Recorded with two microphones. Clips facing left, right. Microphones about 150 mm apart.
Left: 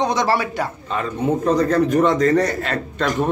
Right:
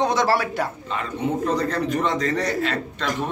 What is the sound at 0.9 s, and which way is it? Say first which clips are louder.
A man's voice: left 8 dB; 40° left (ahead or behind).